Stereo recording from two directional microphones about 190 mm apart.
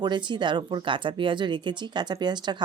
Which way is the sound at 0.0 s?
25° right (ahead or behind).